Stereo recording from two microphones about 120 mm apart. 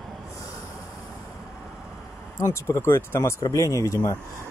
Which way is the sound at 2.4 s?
20° left (ahead or behind).